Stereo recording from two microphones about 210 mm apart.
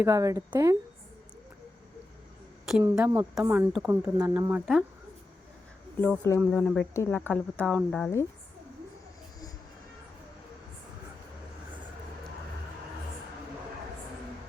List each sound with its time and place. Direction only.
0.0 s speech: 15° right (ahead or behind)
2.8 s speech: 10° right (ahead or behind)
6.0 s speech: 10° left (ahead or behind)